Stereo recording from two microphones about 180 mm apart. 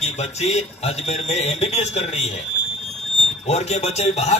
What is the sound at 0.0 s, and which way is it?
A man's voice, 35° left (ahead or behind).